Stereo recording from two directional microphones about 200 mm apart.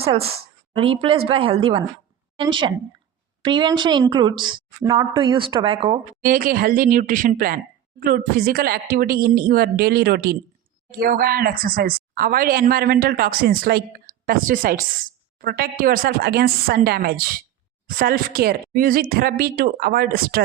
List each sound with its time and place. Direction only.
0.0 s a woman's voice: 30° right (ahead or behind)
6.2 s speech: 45° right (ahead or behind)